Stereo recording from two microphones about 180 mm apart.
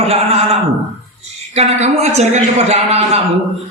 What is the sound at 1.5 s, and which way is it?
Speech, 35° right (ahead or behind).